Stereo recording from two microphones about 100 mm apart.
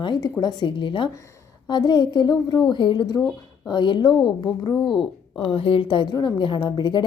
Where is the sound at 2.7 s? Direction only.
50° left (ahead or behind).